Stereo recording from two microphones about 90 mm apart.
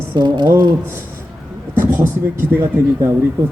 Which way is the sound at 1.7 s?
25° right (ahead or behind).